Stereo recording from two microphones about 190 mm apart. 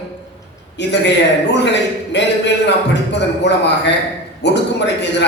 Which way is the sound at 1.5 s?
65° left (ahead or behind).